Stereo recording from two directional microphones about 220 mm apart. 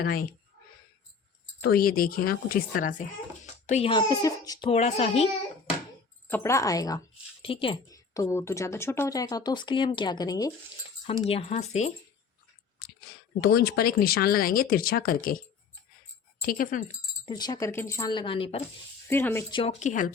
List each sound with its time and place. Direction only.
0.0 s speech: 45° left (ahead or behind)
1.6 s a woman's voice: 45° left (ahead or behind); by 4.7 s 15° left (ahead or behind)
4.7 s speech: 30° left (ahead or behind)
6.2 s a woman's voice: 10° left (ahead or behind)
11.0 s a woman's voice: 30° left (ahead or behind)
13.4 s a woman's voice: 45° left (ahead or behind)
17.2 s speech: 20° left (ahead or behind)
19.0 s a woman's voice: 10° left (ahead or behind)
19.5 s a woman's voice: 30° left (ahead or behind)